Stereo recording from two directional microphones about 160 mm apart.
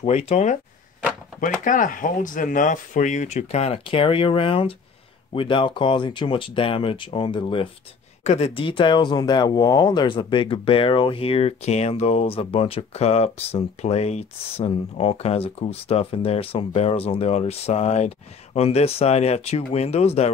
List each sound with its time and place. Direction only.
0.0 s speech: 40° left (ahead or behind)
8.2 s speech: 45° left (ahead or behind)